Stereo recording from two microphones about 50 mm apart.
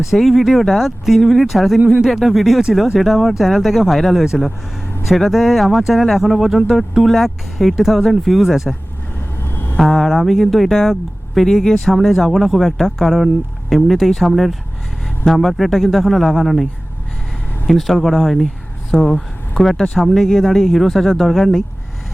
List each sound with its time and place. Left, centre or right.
0.0 s speech: centre
9.4 s vehicle: left
9.7 s speech: centre
17.7 s speech: centre